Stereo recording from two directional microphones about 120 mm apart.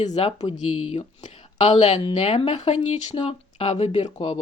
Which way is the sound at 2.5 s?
70° left (ahead or behind).